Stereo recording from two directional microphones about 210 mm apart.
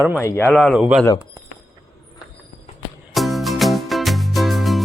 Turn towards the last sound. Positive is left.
turn(degrees=0)  # may be behind; listen again after turning